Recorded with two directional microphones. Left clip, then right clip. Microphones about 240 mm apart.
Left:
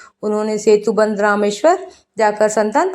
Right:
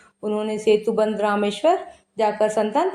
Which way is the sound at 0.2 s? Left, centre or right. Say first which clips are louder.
Left 6 dB; left.